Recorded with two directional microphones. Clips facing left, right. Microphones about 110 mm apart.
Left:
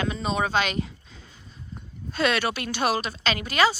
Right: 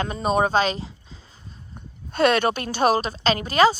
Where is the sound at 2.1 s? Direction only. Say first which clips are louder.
Right 5 dB; 50° right (ahead or behind).